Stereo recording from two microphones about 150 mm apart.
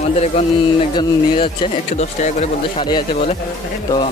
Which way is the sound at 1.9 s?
50° left (ahead or behind).